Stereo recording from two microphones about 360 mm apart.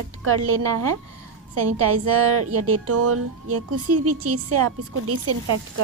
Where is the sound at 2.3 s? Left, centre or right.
Right.